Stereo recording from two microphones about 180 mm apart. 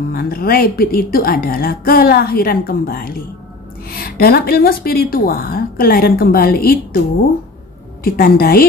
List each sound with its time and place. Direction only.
0.1 s a woman's voice: 55° left (ahead or behind)
8.0 s a woman's voice: 55° left (ahead or behind)